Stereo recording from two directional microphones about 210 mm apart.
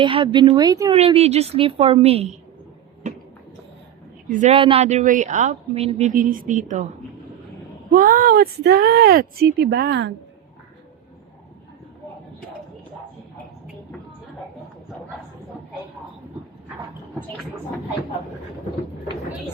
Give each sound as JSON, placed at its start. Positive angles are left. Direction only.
{"t": 0.0, "sound": "a woman's voice", "side_deg": -25}
{"t": 0.9, "sound": "a woman's voice", "side_deg": -30}
{"t": 3.1, "sound": "a sound", "side_deg": -35}
{"t": 4.3, "sound": "speech", "side_deg": -35}
{"t": 7.9, "sound": "speech", "side_deg": -40}